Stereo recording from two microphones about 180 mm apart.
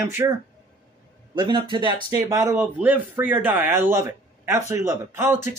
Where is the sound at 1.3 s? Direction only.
25° right (ahead or behind).